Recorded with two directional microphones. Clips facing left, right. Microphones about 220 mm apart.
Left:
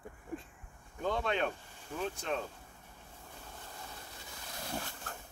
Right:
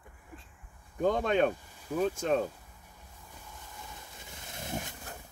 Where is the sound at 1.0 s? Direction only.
45° right (ahead or behind).